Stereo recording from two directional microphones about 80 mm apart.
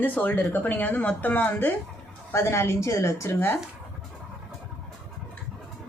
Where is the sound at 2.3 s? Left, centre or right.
Left.